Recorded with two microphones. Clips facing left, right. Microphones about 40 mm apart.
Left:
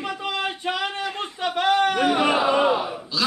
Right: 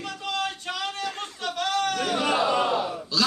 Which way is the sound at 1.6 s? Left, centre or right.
Left.